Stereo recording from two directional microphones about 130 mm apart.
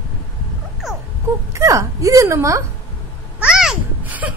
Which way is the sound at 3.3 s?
5° right (ahead or behind).